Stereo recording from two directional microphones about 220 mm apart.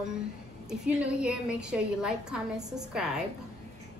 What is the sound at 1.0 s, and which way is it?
A woman's voice, 5° right (ahead or behind).